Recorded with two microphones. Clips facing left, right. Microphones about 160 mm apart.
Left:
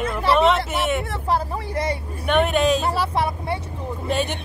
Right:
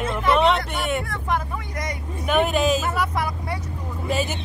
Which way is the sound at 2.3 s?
Centre (ahead or behind).